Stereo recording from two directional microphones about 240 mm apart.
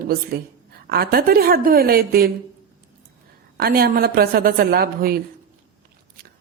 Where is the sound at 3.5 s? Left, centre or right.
Right.